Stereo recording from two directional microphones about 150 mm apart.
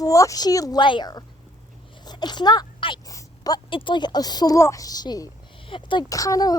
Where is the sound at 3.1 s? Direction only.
25° left (ahead or behind).